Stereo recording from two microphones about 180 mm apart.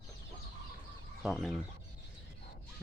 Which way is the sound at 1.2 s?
Centre (ahead or behind).